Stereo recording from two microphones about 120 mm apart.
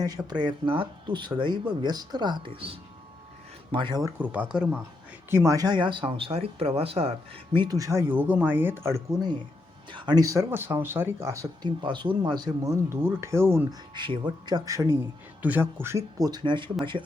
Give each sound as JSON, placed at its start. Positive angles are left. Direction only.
{"t": 0.3, "sound": "speech", "side_deg": -40}
{"t": 4.2, "sound": "speech", "side_deg": -10}
{"t": 5.3, "sound": "speech", "side_deg": -25}
{"t": 7.5, "sound": "speech", "side_deg": -35}
{"t": 11.8, "sound": "speech", "side_deg": -40}
{"t": 13.9, "sound": "speech", "side_deg": -40}
{"t": 15.4, "sound": "speech", "side_deg": -15}